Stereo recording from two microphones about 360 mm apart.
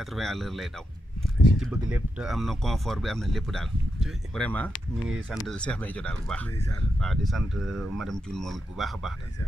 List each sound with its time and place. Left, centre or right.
0.1 s speech: centre